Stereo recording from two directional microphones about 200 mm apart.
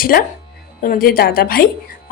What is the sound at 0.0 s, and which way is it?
A woman's voice, 45° left (ahead or behind).